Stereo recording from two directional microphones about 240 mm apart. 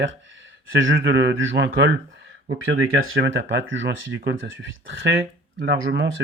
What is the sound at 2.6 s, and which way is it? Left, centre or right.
Speech, right.